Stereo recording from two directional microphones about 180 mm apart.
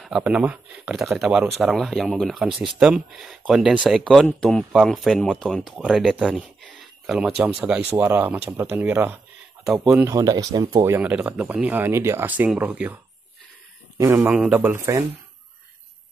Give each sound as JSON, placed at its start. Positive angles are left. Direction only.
{"t": 0.0, "sound": "speech", "side_deg": -5}
{"t": 10.8, "sound": "speech", "side_deg": -10}